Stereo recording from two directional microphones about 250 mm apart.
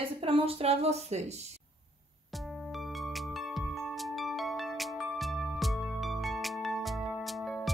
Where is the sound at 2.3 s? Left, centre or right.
Centre.